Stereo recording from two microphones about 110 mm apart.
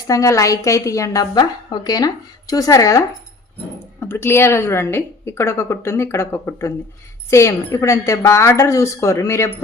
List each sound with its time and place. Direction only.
0.1 s a woman's voice: 30° left (ahead or behind)
4.0 s a woman's voice: 20° left (ahead or behind)